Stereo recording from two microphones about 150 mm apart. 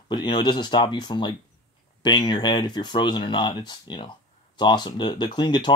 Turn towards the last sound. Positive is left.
turn(degrees=30)  # may be behind; listen again after turning